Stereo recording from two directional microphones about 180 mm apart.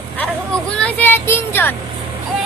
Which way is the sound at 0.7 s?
10° left (ahead or behind).